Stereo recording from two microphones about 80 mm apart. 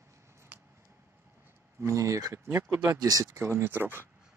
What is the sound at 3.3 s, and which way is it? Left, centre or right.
Speech, right.